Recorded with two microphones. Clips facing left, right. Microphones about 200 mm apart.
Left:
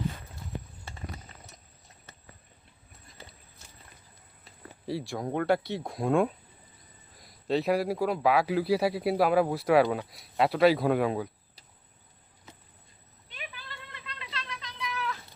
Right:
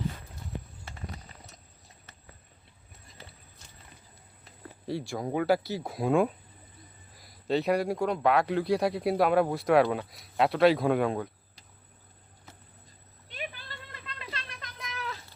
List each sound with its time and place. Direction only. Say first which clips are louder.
4.9 s a man's voice: even; centre (ahead or behind)
13.3 s cat: right 4 dB; 45° right (ahead or behind)